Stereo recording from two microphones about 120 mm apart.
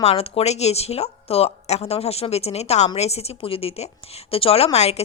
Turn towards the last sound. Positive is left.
turn(degrees=60)  # may be behind; listen again after turning